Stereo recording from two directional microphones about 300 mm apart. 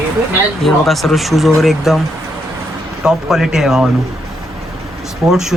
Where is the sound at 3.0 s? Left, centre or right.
Centre.